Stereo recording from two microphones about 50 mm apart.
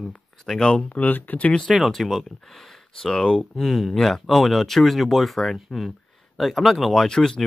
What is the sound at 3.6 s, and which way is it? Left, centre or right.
Speech, centre.